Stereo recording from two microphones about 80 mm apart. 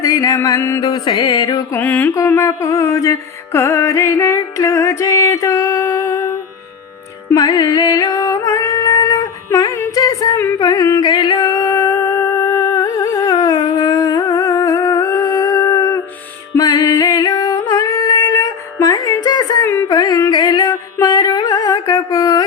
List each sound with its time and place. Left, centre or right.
0.0 s music: left
0.8 s music: left
1.7 s mantra: left
2.2 s music: left
7.3 s music: left
10.3 s music: left
10.6 s music: left
11.0 s music: left
12.4 s humming: left
16.6 s music: left
18.2 s music: left
19.2 s a sound: left
19.6 s a sound: left
19.9 s music: left